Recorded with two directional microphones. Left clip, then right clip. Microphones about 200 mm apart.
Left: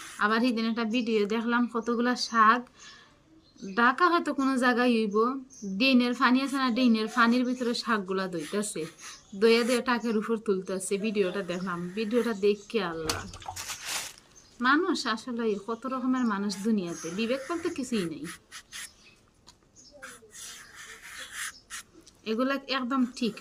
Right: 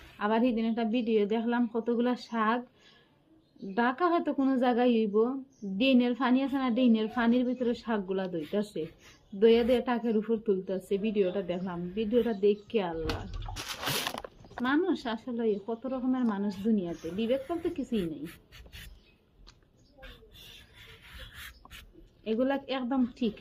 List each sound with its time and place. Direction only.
0.2 s a woman's voice: 20° left (ahead or behind)
3.8 s a woman's voice: 15° left (ahead or behind)
14.6 s a woman's voice: 15° left (ahead or behind)
21.0 s a sound: 5° left (ahead or behind)
22.2 s a woman's voice: 15° left (ahead or behind)